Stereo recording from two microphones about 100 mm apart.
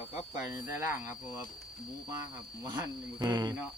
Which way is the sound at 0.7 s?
25° right (ahead or behind).